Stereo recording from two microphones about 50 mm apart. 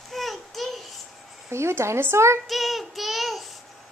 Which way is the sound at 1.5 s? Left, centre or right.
Right.